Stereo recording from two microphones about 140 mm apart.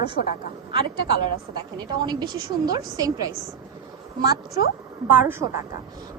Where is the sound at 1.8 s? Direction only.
30° right (ahead or behind).